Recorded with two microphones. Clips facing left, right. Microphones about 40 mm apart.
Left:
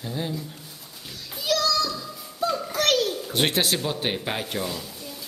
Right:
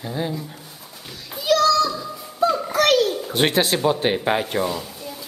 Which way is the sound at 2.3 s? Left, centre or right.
Centre.